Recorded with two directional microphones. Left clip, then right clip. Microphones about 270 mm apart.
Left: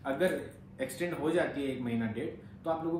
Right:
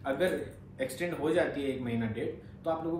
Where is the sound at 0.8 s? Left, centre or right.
Centre.